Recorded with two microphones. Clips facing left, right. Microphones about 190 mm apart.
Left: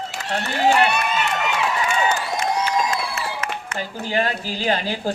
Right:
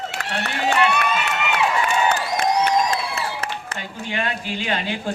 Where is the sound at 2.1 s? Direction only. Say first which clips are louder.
Right 2 dB; 60° right (ahead or behind).